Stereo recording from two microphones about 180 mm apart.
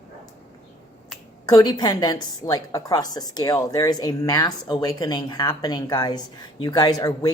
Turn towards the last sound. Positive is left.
turn(degrees=20)  # may be behind; listen again after turning